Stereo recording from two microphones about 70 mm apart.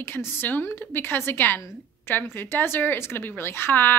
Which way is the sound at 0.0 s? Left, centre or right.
Left.